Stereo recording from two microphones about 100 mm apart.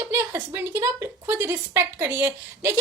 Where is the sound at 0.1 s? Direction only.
25° right (ahead or behind).